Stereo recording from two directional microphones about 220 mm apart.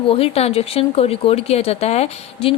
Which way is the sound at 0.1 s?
25° left (ahead or behind).